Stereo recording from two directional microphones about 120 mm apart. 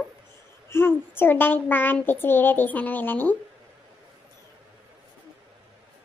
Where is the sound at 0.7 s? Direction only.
20° left (ahead or behind).